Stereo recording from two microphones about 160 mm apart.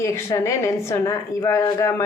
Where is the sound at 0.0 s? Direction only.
20° left (ahead or behind).